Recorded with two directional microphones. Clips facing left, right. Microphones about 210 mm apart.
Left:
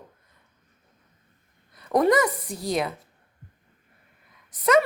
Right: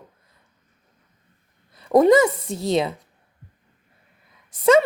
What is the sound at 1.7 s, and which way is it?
A woman's voice, 25° right (ahead or behind).